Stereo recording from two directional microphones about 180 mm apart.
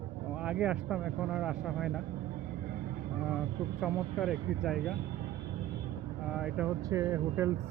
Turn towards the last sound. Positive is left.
turn(degrees=-15)  # may be behind; listen again after turning